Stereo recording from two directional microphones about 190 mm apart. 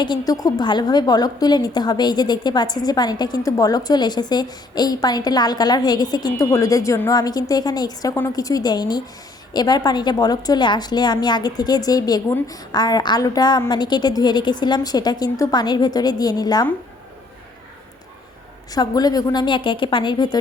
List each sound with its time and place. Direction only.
0.0 s a woman's voice: 20° left (ahead or behind)
18.7 s a woman's voice: 20° left (ahead or behind)